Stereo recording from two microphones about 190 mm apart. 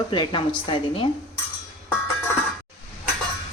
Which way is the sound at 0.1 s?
25° left (ahead or behind).